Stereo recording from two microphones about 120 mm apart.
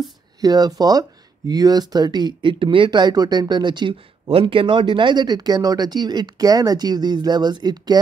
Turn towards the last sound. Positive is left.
turn(degrees=-35)  # may be behind; listen again after turning